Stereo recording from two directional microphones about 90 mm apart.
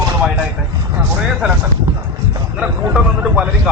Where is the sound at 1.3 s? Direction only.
10° right (ahead or behind).